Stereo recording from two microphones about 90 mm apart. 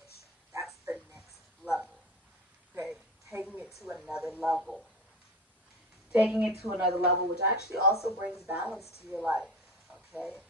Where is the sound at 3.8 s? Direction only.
10° right (ahead or behind).